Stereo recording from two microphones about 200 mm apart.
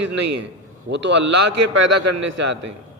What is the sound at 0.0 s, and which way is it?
A man's voice, 60° right (ahead or behind).